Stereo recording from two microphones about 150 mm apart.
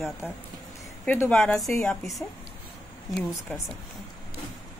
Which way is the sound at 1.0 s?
15° left (ahead or behind).